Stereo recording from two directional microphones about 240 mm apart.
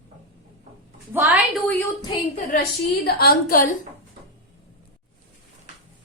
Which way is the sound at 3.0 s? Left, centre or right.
Left.